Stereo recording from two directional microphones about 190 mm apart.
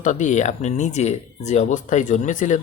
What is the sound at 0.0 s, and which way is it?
Speech, 40° left (ahead or behind).